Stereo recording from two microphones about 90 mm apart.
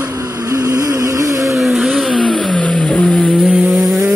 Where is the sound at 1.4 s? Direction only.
Centre (ahead or behind).